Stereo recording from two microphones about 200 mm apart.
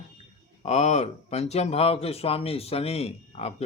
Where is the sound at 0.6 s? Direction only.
35° left (ahead or behind).